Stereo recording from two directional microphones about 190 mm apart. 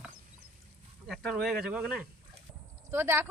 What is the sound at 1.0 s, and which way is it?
Speech, centre (ahead or behind).